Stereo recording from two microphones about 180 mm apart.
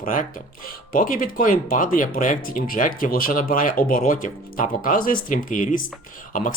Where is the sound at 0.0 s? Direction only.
50° left (ahead or behind).